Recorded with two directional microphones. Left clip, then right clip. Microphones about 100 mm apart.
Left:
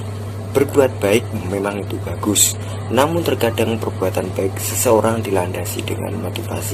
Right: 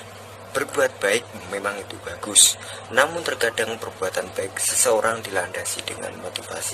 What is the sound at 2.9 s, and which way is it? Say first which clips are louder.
Speech: left 4 dB; 20° right (ahead or behind).